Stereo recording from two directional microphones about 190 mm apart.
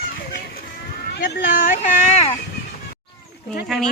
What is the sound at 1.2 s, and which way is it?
Speech, 45° left (ahead or behind).